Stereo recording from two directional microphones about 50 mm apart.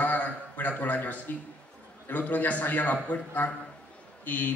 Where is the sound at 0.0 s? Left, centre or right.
Left.